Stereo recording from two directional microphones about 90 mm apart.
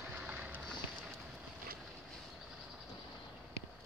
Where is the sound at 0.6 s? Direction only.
5° left (ahead or behind).